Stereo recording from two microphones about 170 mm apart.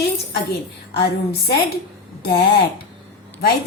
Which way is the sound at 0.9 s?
70° left (ahead or behind).